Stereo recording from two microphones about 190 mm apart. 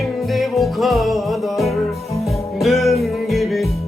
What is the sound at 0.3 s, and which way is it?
Music, centre (ahead or behind).